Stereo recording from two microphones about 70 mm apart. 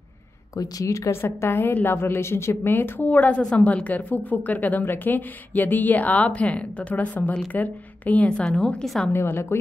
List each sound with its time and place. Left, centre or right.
0.6 s speech: left
1.2 s a woman's voice: left; by 9.1 s centre
9.1 s a woman's voice: left